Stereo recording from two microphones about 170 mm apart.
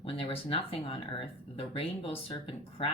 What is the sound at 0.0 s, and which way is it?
Speech, 35° left (ahead or behind).